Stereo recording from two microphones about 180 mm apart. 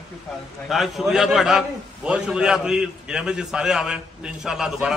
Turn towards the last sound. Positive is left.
turn(degrees=0)  # may be behind; listen again after turning